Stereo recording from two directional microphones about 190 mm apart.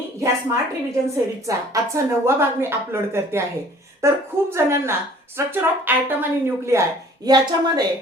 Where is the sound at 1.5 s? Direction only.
20° right (ahead or behind).